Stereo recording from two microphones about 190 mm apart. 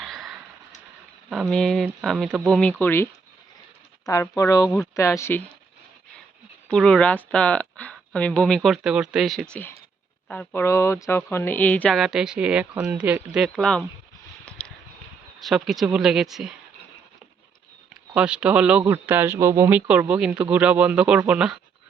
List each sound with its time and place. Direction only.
0.0 s a sound: centre (ahead or behind)
1.3 s speech: centre (ahead or behind)
6.7 s speech: 5° left (ahead or behind)
14.6 s a sound: 5° left (ahead or behind)
15.4 s speech: centre (ahead or behind)
18.1 s speech: 5° right (ahead or behind)